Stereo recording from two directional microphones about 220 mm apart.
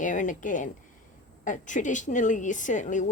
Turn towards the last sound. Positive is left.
turn(degrees=35)  # may be behind; listen again after turning